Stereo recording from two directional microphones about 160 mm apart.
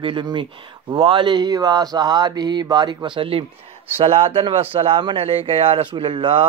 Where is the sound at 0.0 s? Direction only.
30° right (ahead or behind).